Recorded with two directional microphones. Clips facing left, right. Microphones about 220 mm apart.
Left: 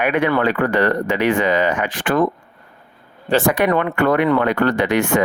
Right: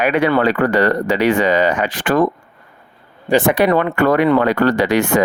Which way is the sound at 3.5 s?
30° right (ahead or behind).